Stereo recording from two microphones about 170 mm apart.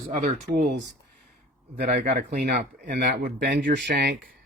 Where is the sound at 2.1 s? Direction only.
55° right (ahead or behind).